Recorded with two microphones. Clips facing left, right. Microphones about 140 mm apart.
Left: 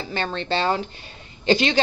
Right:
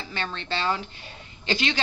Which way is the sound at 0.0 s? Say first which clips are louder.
Left 6 dB; 35° left (ahead or behind).